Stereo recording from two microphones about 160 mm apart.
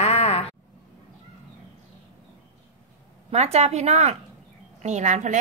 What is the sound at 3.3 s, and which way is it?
A woman's voice, 45° right (ahead or behind).